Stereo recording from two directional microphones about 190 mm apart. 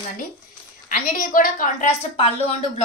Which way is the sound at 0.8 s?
45° left (ahead or behind).